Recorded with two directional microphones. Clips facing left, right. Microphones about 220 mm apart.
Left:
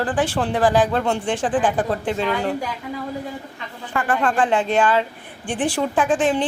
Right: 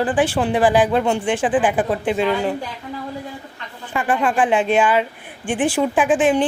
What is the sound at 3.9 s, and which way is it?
Speech, 15° right (ahead or behind).